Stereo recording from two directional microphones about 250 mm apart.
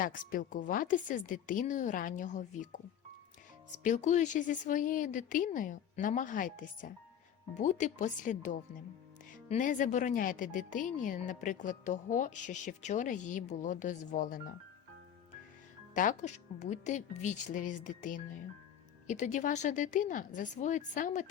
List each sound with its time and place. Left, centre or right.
0.0 s a woman's voice: left
3.8 s a woman's voice: left
16.0 s a woman's voice: left